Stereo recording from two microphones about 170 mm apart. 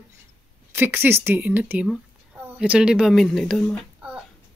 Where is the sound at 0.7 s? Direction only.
10° right (ahead or behind).